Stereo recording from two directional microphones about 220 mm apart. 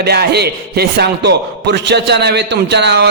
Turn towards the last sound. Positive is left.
turn(degrees=-50)  # may be behind; listen again after turning